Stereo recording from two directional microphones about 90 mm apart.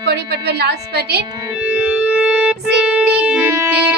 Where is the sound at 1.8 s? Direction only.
15° right (ahead or behind).